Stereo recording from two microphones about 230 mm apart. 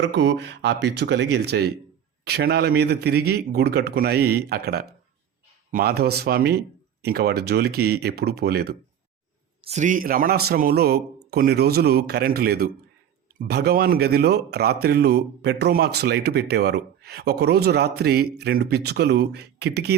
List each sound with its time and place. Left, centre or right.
0.0 s speech: right
9.6 s a man's voice: right